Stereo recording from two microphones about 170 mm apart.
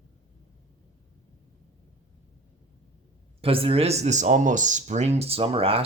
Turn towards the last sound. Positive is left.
turn(degrees=-35)  # may be behind; listen again after turning